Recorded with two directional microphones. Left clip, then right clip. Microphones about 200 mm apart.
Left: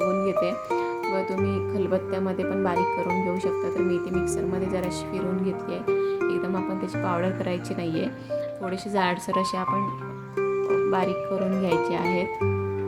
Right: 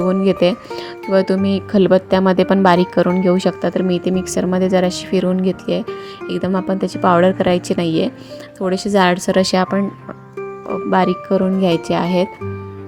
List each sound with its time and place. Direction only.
0.1 s music: 40° right (ahead or behind)
1.1 s speech: 40° right (ahead or behind)
10.9 s speech: 40° right (ahead or behind)